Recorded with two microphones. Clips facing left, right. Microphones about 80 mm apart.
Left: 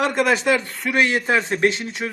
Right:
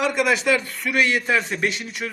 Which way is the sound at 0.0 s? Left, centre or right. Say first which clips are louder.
Left 2 dB; left.